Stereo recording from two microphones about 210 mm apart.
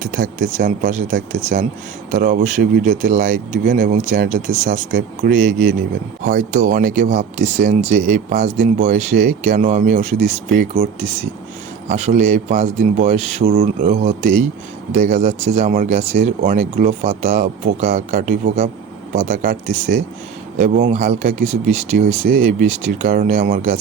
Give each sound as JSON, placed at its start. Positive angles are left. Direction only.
{"t": 0.0, "sound": "speech", "side_deg": -40}
{"t": 11.9, "sound": "speech", "side_deg": -35}